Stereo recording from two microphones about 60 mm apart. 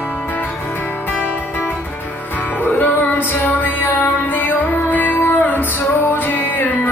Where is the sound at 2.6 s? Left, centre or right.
Left.